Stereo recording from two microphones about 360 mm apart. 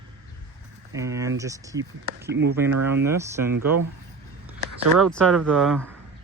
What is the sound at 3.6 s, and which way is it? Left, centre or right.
Speech, right.